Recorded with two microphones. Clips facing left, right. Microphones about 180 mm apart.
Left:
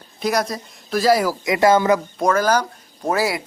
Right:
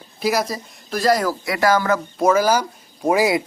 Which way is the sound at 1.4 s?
20° left (ahead or behind).